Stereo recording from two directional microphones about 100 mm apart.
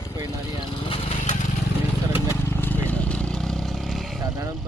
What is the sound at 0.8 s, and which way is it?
Vehicle, 65° left (ahead or behind).